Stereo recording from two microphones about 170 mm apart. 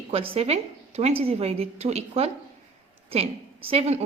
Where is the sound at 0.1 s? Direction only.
35° right (ahead or behind).